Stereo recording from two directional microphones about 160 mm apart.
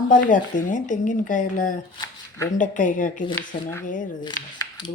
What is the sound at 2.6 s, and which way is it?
Speech, 50° left (ahead or behind).